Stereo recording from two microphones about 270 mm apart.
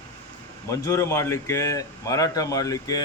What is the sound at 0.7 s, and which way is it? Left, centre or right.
Speech, centre.